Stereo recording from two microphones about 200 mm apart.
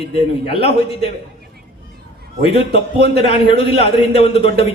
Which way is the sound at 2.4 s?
30° left (ahead or behind).